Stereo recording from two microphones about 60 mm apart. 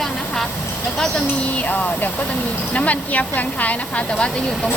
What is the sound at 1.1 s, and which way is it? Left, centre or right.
A woman's voice, left.